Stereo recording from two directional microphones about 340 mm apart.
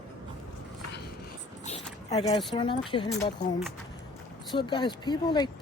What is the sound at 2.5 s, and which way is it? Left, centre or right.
Speech, centre.